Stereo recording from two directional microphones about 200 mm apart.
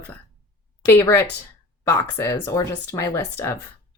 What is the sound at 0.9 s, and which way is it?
Speech, 10° left (ahead or behind).